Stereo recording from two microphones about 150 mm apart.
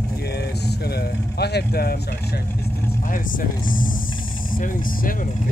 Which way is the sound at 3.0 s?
65° left (ahead or behind).